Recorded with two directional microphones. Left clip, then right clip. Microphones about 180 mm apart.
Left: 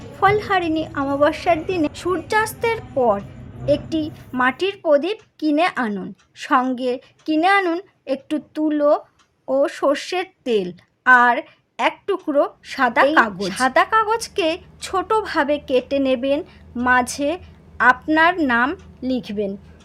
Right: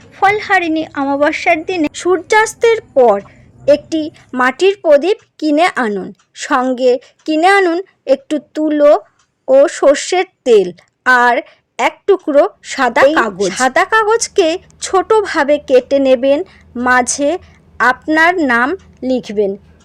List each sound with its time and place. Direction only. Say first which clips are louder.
0.2 s a woman's voice: right 6 dB; 20° right (ahead or behind)
1.9 s a woman's voice: right 9 dB; 35° right (ahead or behind)